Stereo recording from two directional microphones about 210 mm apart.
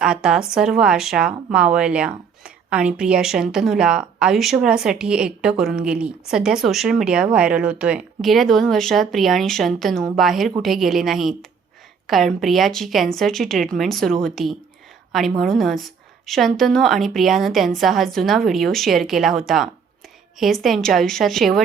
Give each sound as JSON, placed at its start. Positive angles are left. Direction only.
{"t": 0.0, "sound": "speech", "side_deg": -5}